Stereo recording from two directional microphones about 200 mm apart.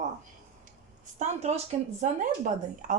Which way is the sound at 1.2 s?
35° right (ahead or behind).